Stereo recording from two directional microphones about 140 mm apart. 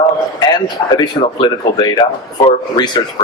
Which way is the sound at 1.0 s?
30° left (ahead or behind).